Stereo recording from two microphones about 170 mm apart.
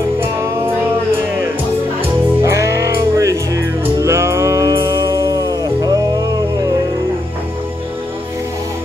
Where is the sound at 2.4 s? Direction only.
15° right (ahead or behind).